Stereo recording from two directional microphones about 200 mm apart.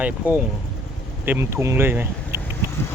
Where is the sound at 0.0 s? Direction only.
10° right (ahead or behind).